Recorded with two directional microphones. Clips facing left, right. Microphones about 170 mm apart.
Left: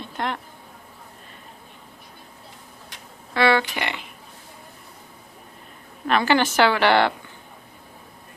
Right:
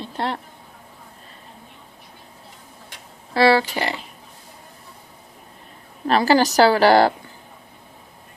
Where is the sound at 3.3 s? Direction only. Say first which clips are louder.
Right 3 dB; 35° right (ahead or behind).